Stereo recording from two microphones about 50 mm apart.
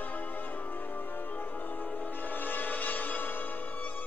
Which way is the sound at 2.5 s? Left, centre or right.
Left.